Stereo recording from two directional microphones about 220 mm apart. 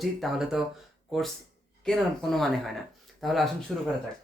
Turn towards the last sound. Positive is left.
turn(degrees=0)  # may be behind; listen again after turning